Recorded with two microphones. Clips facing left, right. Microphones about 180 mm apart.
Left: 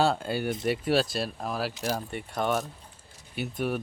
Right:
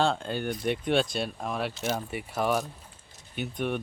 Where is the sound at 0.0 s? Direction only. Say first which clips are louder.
Left 1 dB; 5° left (ahead or behind).